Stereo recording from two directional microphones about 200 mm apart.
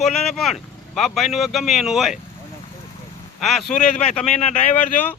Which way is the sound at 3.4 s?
Centre (ahead or behind).